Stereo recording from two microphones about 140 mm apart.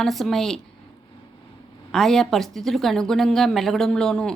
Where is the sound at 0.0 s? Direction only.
Centre (ahead or behind).